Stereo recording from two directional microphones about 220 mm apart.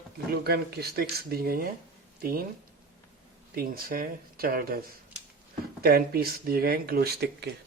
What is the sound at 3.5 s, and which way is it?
Speech, 40° right (ahead or behind).